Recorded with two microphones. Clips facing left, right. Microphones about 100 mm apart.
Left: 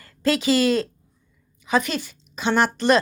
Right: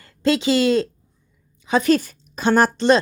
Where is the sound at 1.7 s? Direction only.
35° right (ahead or behind).